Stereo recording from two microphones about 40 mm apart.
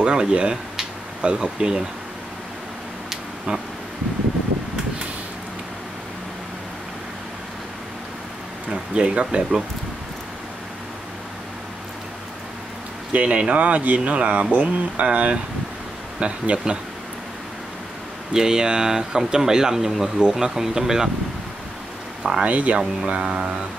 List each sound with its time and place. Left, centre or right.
0.0 s speech: right
8.9 s speech: right
13.1 s speech: right
18.3 s speech: centre
22.4 s speech: right
22.8 s speech: right